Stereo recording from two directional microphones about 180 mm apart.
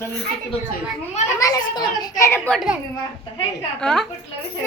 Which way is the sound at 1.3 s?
20° left (ahead or behind).